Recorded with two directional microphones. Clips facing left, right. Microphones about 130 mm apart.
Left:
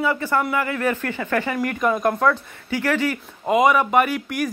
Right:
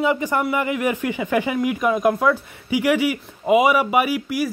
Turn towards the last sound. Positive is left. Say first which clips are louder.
# even
turn(degrees=-5)  # may be behind; listen again after turning